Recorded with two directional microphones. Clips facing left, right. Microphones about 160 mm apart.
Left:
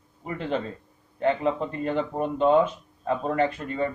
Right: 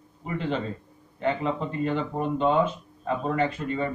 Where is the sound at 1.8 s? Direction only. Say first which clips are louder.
Left 1 dB; 45° left (ahead or behind).